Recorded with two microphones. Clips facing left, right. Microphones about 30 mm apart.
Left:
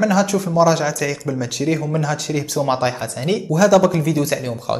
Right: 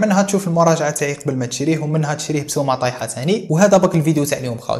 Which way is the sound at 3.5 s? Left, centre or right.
Left.